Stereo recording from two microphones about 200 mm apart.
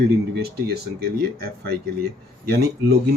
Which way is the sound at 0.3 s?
50° right (ahead or behind).